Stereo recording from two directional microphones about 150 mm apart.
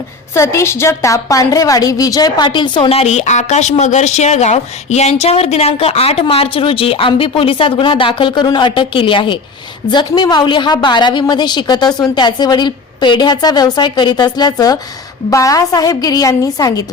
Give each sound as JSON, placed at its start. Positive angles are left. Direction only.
{"t": 0.3, "sound": "a woman's voice", "side_deg": 20}